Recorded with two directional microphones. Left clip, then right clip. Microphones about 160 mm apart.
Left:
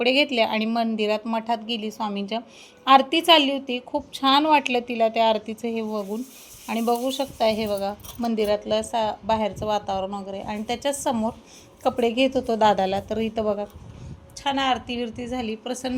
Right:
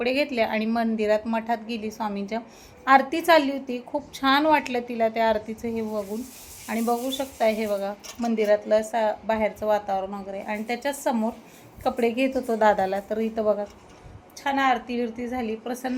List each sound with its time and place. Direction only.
0.0 s speech: 40° left (ahead or behind)
14.4 s a woman's voice: 50° left (ahead or behind)